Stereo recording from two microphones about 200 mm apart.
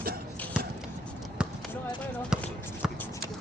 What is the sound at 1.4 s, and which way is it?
Basketball bounce, 5° right (ahead or behind).